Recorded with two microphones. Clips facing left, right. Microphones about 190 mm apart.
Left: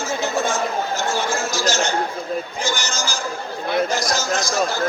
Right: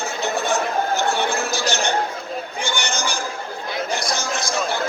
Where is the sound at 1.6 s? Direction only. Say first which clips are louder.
Left 2 dB; 60° right (ahead or behind).